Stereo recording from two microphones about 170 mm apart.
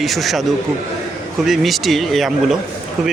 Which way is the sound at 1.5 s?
Centre (ahead or behind).